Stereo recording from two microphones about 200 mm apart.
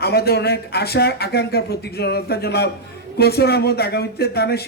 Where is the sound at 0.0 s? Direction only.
50° left (ahead or behind).